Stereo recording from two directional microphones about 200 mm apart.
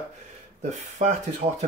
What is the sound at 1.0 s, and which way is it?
Speech, 35° right (ahead or behind).